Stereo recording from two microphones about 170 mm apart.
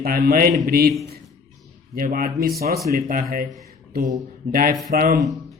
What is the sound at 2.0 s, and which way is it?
A man's voice, 60° right (ahead or behind).